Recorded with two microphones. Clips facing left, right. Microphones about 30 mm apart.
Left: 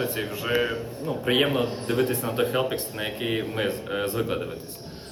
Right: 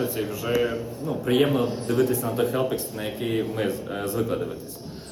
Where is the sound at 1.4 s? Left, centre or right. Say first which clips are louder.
Right 2 dB; centre.